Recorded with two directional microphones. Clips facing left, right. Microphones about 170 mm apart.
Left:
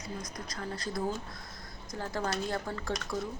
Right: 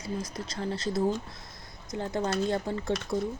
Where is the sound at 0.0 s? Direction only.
30° right (ahead or behind).